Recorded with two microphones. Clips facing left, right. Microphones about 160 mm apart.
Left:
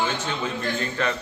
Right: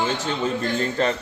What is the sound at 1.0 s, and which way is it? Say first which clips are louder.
Speech: right 4 dB; 35° right (ahead or behind).